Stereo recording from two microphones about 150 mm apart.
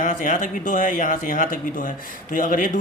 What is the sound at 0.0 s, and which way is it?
Speech, 60° left (ahead or behind).